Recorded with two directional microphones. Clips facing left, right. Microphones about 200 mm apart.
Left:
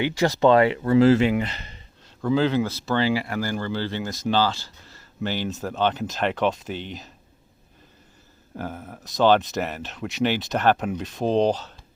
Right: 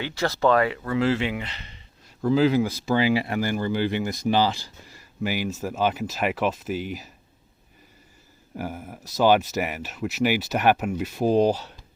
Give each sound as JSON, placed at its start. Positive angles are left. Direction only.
{"t": 0.0, "sound": "speech", "side_deg": 15}
{"t": 2.0, "sound": "speech", "side_deg": -5}
{"t": 8.5, "sound": "speech", "side_deg": -10}